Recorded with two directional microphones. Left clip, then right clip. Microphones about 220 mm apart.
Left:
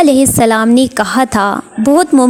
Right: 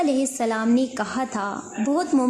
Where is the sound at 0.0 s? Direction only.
40° left (ahead or behind).